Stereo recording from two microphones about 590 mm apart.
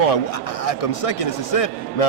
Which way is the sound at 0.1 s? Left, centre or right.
Left.